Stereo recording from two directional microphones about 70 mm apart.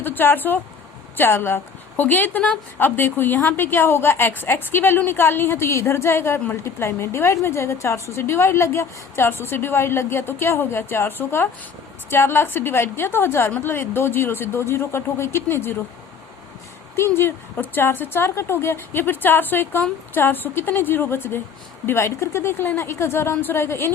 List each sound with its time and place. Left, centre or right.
0.0 s a woman's voice: left
16.9 s a woman's voice: left